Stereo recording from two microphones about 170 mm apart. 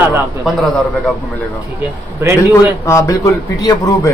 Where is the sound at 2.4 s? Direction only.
20° left (ahead or behind).